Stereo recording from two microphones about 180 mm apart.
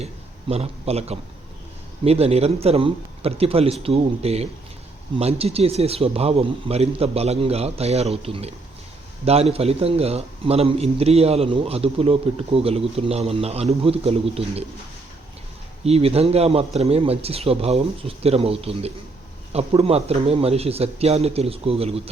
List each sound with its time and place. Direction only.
0.0 s a man's voice: 35° right (ahead or behind)
15.8 s a man's voice: 35° right (ahead or behind)